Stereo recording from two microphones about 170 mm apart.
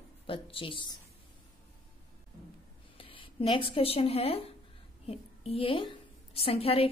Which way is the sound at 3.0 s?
30° left (ahead or behind).